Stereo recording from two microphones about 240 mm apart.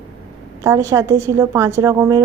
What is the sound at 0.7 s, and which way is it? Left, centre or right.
Speech, centre.